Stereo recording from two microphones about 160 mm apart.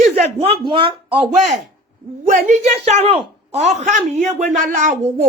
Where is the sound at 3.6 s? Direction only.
45° right (ahead or behind).